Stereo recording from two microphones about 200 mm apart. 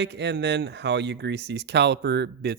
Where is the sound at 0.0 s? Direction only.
60° right (ahead or behind).